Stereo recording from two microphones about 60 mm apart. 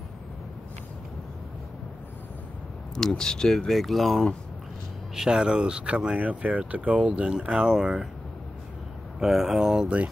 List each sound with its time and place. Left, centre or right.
3.0 s speech: centre
5.1 s speech: centre
9.2 s speech: centre